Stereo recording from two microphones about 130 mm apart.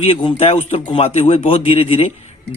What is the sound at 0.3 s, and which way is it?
Speech, 55° left (ahead or behind).